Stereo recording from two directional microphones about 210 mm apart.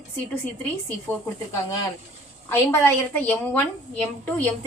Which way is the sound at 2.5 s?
10° left (ahead or behind).